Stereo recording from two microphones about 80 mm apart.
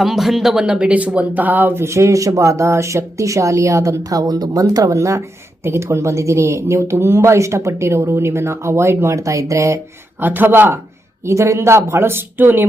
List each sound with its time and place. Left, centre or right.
0.0 s speech: centre; by 9.8 s right
10.2 s speech: right